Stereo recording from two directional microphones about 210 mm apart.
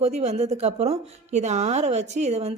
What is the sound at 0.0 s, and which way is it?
Speech, 30° right (ahead or behind).